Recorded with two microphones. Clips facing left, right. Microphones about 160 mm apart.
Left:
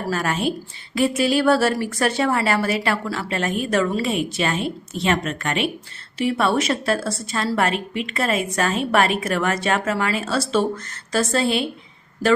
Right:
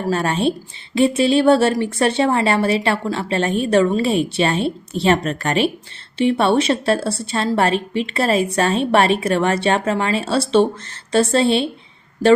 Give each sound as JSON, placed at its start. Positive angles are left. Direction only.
{"t": 0.1, "sound": "a woman's voice", "side_deg": -30}